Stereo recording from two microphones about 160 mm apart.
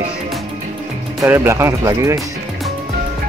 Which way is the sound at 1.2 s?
15° right (ahead or behind).